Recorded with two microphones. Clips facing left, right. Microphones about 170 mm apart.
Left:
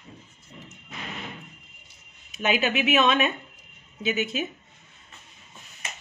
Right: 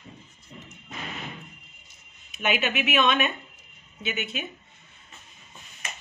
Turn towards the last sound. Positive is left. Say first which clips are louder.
# left 5 dB
turn(degrees=40)  # may be behind; listen again after turning